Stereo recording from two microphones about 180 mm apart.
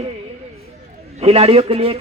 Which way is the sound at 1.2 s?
35° right (ahead or behind).